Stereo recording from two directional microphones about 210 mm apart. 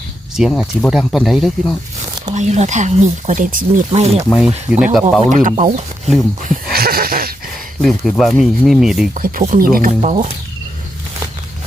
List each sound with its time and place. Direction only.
0.3 s speech: centre (ahead or behind)
2.3 s speech: 35° right (ahead or behind)
4.3 s speech: 5° right (ahead or behind)
5.2 s speech: 35° right (ahead or behind)
6.4 s a sound: 40° right (ahead or behind)
7.8 s speech: centre (ahead or behind)
9.1 s speech: 40° right (ahead or behind)
10.0 s speech: 35° right (ahead or behind)